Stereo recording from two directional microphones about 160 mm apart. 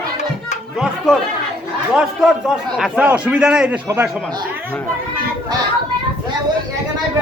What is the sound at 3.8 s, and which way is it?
Speech, 15° right (ahead or behind).